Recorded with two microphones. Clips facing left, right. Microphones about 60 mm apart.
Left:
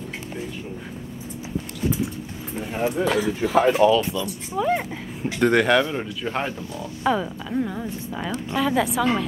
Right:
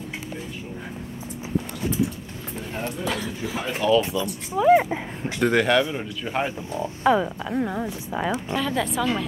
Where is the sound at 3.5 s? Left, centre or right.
Left.